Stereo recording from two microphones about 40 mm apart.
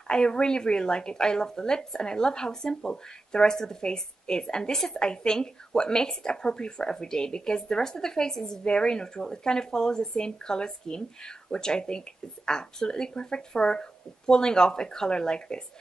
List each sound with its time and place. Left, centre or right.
0.1 s a woman's voice: left